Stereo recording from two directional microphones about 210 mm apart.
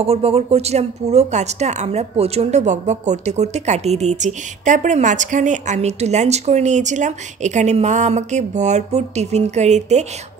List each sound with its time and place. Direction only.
0.0 s a woman's voice: 30° right (ahead or behind)